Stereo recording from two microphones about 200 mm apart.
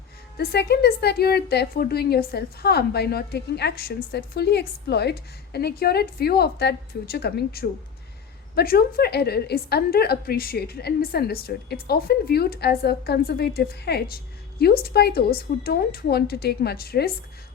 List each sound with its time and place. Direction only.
0.3 s a woman's voice: 55° left (ahead or behind)